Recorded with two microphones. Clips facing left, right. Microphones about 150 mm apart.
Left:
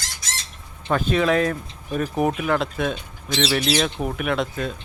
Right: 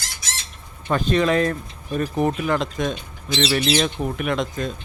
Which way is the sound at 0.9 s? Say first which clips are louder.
Right 1 dB; 5° left (ahead or behind).